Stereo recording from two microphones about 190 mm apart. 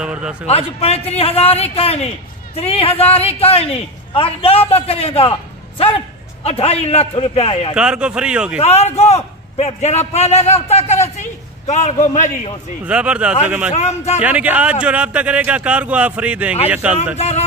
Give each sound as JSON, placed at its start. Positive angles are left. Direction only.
{"t": 0.0, "sound": "speech", "side_deg": -5}
{"t": 0.5, "sound": "a man's voice", "side_deg": 30}
{"t": 7.7, "sound": "speech", "side_deg": -5}
{"t": 8.5, "sound": "a man's voice", "side_deg": 35}
{"t": 12.8, "sound": "a man's voice", "side_deg": -5}
{"t": 13.7, "sound": "a man's voice", "side_deg": 35}
{"t": 14.2, "sound": "a man's voice", "side_deg": -5}
{"t": 17.2, "sound": "a man's voice", "side_deg": 35}